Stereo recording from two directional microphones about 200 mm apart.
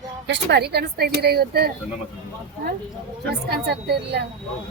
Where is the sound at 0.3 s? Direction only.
55° right (ahead or behind).